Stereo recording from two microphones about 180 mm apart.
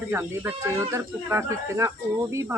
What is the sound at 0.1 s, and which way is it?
Speech, 10° right (ahead or behind).